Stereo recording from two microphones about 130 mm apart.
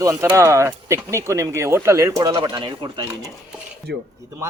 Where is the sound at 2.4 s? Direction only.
35° right (ahead or behind).